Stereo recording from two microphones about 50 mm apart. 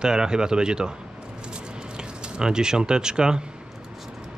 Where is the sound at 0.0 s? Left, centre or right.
Centre.